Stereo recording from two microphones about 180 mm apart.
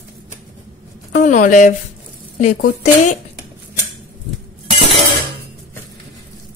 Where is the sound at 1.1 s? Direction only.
45° left (ahead or behind).